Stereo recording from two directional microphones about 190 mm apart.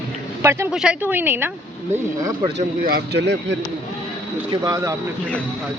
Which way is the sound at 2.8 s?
55° right (ahead or behind).